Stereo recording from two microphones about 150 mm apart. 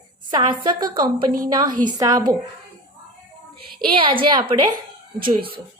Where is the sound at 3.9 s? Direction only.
35° right (ahead or behind).